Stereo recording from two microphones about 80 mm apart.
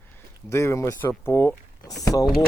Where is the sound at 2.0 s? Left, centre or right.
Left.